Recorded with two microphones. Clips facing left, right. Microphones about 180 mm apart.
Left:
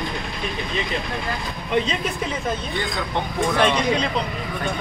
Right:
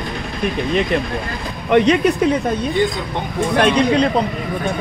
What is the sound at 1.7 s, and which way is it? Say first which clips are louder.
Speech: right 10 dB; 70° right (ahead or behind).